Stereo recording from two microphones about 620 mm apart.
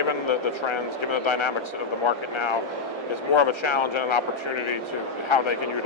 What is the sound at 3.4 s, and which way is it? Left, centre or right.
Speech, left.